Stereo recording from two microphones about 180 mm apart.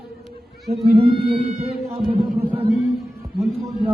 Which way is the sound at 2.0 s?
30° right (ahead or behind).